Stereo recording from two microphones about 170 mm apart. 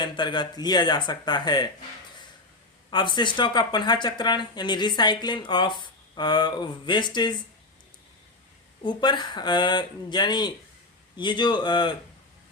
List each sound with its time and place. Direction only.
0.0 s speech: 25° left (ahead or behind)
2.9 s speech: 25° left (ahead or behind)
8.8 s speech: 25° left (ahead or behind)